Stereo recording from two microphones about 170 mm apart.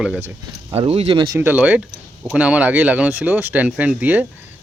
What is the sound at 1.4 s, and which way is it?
Speech, 10° right (ahead or behind).